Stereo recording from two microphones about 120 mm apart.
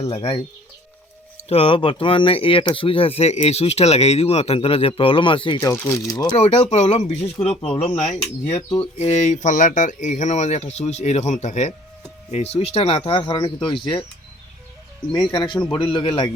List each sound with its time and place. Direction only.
0.0 s speech: 55° left (ahead or behind)
1.5 s speech: 50° left (ahead or behind)
5.5 s speech: 25° left (ahead or behind)
6.3 s speech: 60° left (ahead or behind); by 11.7 s 80° left
12.3 s speech: 60° left (ahead or behind)
13.1 s speech: 45° left (ahead or behind)
15.1 s a man's voice: 40° left (ahead or behind)